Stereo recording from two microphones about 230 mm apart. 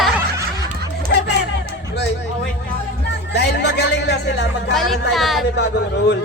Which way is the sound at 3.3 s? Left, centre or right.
Left.